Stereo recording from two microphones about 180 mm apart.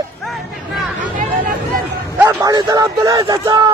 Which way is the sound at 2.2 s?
20° right (ahead or behind).